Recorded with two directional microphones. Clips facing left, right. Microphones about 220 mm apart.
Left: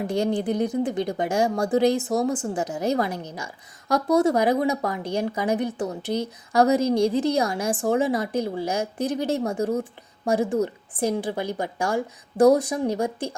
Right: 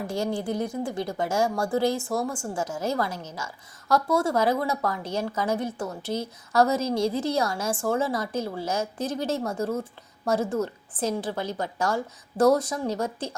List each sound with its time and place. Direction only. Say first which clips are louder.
0.0 s a woman's voice: left 4 dB; 20° left (ahead or behind)